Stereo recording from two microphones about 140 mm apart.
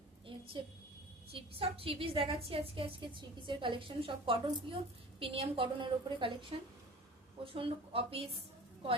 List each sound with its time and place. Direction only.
1.3 s a woman's voice: 40° right (ahead or behind)